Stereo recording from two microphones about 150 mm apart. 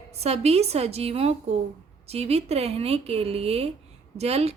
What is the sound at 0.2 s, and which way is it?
A woman's voice, 45° right (ahead or behind).